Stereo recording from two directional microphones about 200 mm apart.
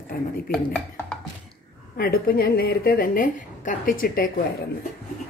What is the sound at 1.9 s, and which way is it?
A woman's voice, 50° left (ahead or behind).